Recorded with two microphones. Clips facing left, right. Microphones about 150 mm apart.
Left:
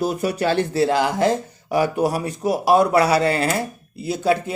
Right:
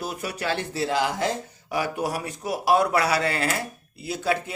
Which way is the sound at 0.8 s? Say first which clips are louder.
Left 4 dB; 50° left (ahead or behind).